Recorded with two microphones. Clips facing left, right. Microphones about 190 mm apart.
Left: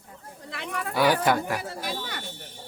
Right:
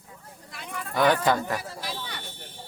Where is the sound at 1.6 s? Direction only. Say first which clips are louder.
Left 3 dB; 55° left (ahead or behind).